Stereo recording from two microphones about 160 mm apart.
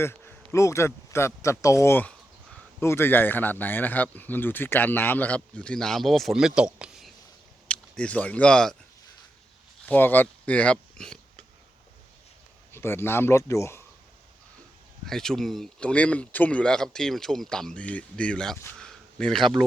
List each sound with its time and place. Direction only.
0.0 s speech: 15° left (ahead or behind); by 7.1 s 5° right (ahead or behind)
7.7 s speech: 5° left (ahead or behind)
9.8 s speech: 10° left (ahead or behind)
12.7 s speech: 15° left (ahead or behind)
15.0 s speech: 5° left (ahead or behind)
18.6 s a sound: 5° left (ahead or behind)